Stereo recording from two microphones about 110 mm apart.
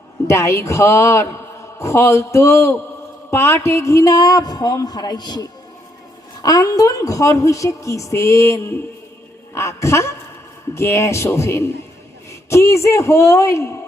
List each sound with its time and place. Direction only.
0.3 s a woman's voice: 25° left (ahead or behind)